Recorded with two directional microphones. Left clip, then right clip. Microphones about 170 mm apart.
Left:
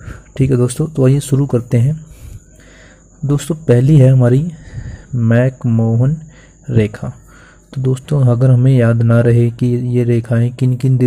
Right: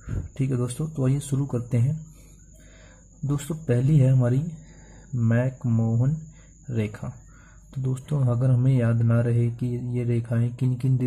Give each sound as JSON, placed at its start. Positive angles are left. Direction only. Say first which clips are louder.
{"t": 0.0, "sound": "speech", "louder": "left 13 dB", "side_deg": 30}
{"t": 3.3, "sound": "speech", "louder": "left 13 dB", "side_deg": 25}